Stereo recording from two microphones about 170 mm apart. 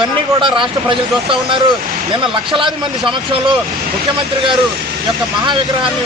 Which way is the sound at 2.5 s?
30° right (ahead or behind).